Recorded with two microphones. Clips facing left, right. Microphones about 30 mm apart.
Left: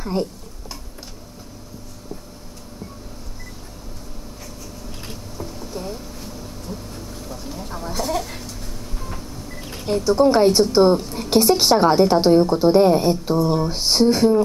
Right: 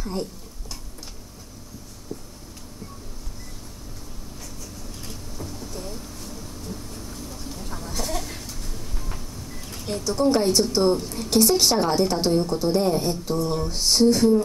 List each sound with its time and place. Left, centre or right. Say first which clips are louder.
0.0 s a sound: left 6 dB; left
5.4 s boat: left 5 dB; centre
9.6 s a woman's voice: left 8 dB; left